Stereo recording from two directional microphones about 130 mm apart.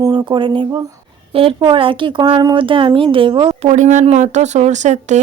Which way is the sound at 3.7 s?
70° right (ahead or behind).